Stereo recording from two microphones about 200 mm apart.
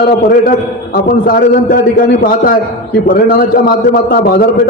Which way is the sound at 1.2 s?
45° left (ahead or behind).